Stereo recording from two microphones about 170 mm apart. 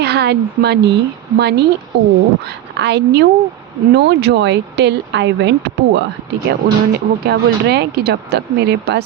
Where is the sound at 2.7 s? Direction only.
90° right.